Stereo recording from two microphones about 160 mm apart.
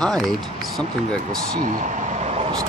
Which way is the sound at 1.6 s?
50° right (ahead or behind).